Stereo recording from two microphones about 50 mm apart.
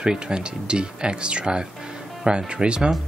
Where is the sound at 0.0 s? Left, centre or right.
Centre.